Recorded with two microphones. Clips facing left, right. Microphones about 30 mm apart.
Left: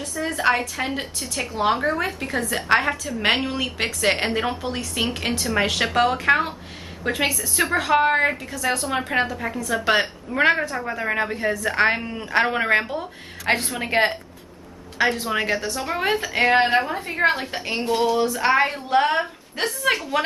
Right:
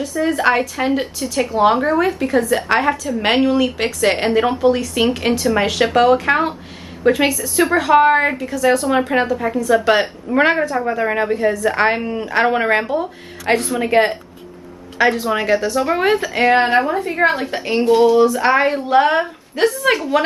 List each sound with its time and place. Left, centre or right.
0.3 s a woman's voice: centre
10.3 s a woman's voice: right
10.7 s a woman's voice: centre
13.7 s a woman's voice: centre
16.2 s a woman's voice: centre